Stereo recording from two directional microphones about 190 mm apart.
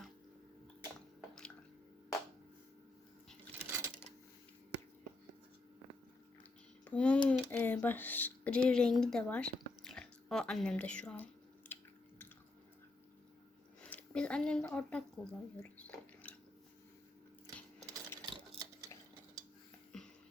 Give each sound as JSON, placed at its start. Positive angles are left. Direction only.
{"t": 3.6, "sound": "coin", "side_deg": -15}
{"t": 6.8, "sound": "a sound", "side_deg": 5}
{"t": 7.5, "sound": "speech", "side_deg": 10}
{"t": 11.6, "sound": "chewing", "side_deg": 10}
{"t": 13.8, "sound": "speech", "side_deg": 5}
{"t": 15.9, "sound": "a sound", "side_deg": 10}
{"t": 17.4, "sound": "coin", "side_deg": -20}
{"t": 18.3, "sound": "stir", "side_deg": -20}
{"t": 19.9, "sound": "music", "side_deg": 5}